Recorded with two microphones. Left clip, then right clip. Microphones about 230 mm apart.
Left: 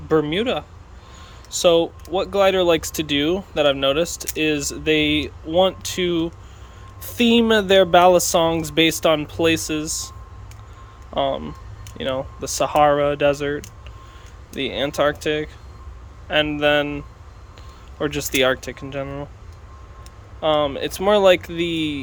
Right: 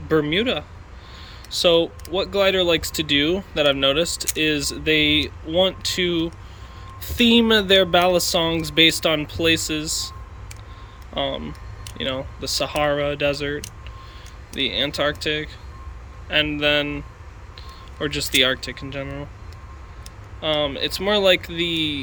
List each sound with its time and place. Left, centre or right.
0.1 s speech: centre
1.6 s speech: centre
9.8 s speech: left
11.1 s speech: centre
20.4 s speech: centre